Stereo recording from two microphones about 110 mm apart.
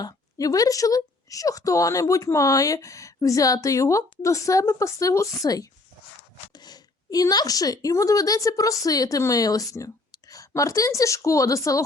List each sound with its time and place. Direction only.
0.0 s speech: 35° left (ahead or behind)